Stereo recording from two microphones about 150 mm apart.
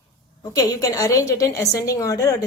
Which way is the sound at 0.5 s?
25° left (ahead or behind).